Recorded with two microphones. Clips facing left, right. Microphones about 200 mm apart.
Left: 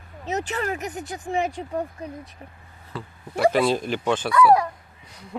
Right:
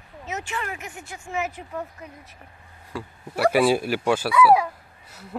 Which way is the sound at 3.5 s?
10° right (ahead or behind).